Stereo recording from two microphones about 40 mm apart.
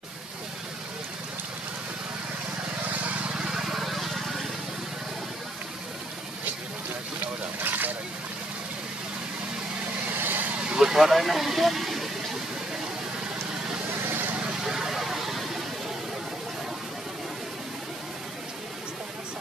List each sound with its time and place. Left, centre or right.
3.3 s vehicle: centre
7.6 s a sound: right
10.1 s vehicle: right
10.8 s speech: centre
14.0 s vehicle: right
14.6 s vehicle: centre